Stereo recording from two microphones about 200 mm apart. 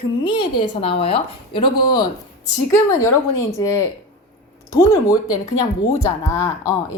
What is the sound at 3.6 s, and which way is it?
A woman's voice, 15° left (ahead or behind).